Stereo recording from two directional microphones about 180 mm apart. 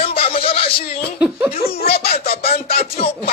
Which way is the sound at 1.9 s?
60° left (ahead or behind).